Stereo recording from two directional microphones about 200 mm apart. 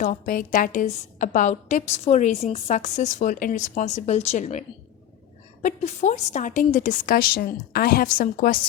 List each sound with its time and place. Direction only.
0.0 s a woman's voice: 40° left (ahead or behind)
5.6 s a woman's voice: 35° left (ahead or behind)